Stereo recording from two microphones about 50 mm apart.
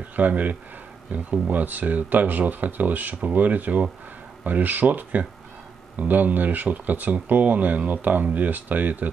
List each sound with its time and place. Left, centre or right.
0.1 s speech: right